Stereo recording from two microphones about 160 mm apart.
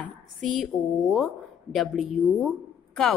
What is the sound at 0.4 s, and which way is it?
A woman's voice, centre (ahead or behind).